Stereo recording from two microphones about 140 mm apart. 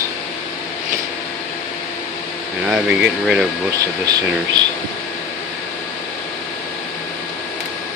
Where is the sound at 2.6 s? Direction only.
5° right (ahead or behind).